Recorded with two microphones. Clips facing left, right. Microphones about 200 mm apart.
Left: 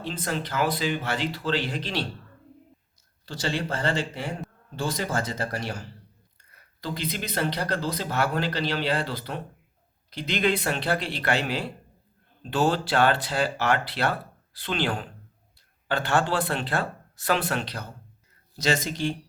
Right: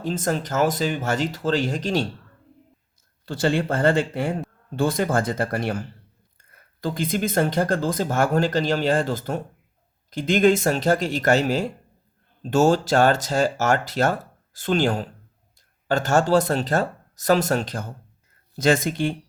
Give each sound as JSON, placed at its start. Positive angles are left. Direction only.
{"t": 0.0, "sound": "speech", "side_deg": -45}
{"t": 3.2, "sound": "speech", "side_deg": -55}